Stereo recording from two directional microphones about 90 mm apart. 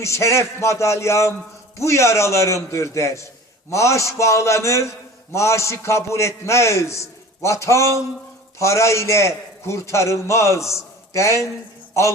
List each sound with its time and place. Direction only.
0.0 s a man's voice: 35° left (ahead or behind)